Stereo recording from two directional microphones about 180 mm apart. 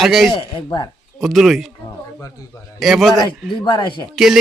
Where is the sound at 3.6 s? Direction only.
25° left (ahead or behind).